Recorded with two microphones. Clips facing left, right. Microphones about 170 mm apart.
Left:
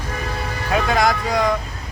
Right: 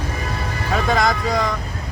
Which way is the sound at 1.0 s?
5° left (ahead or behind).